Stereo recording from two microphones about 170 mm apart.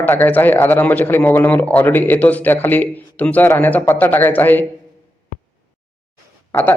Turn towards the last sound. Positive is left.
turn(degrees=10)  # may be behind; listen again after turning